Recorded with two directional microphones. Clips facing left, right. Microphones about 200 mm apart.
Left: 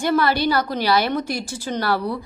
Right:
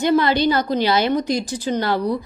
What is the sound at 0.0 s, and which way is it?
A woman's voice, 20° right (ahead or behind).